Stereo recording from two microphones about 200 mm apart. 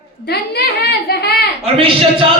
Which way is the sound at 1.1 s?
50° left (ahead or behind).